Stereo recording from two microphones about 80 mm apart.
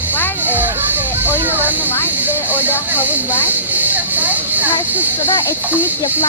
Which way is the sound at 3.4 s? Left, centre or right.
Right.